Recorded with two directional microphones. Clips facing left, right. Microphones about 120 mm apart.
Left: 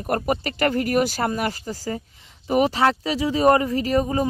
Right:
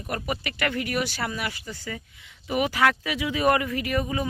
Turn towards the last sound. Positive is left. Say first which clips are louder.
# left 6 dB
turn(degrees=35)  # may be behind; listen again after turning